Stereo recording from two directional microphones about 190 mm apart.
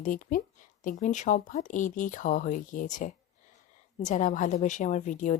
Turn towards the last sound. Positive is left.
turn(degrees=40)  # may be behind; listen again after turning